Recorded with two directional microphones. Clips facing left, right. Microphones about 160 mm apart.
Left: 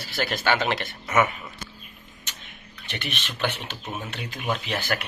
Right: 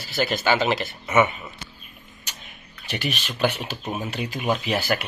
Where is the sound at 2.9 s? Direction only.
5° right (ahead or behind).